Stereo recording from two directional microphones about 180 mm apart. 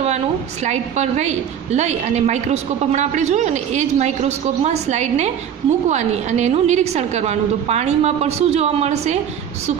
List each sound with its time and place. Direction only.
0.7 s a woman's voice: 40° right (ahead or behind)